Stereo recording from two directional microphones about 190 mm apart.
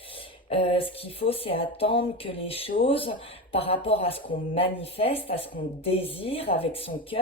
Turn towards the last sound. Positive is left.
turn(degrees=30)  # may be behind; listen again after turning